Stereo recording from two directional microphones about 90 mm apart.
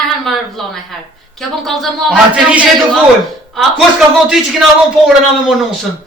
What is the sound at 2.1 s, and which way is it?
Speech, 15° right (ahead or behind).